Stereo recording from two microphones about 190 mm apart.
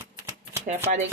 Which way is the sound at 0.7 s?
50° right (ahead or behind).